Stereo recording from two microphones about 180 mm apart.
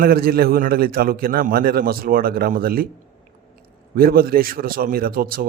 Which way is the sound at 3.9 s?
55° right (ahead or behind).